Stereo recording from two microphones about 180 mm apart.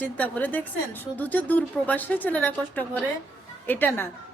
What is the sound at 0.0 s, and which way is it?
A woman's voice, 10° left (ahead or behind).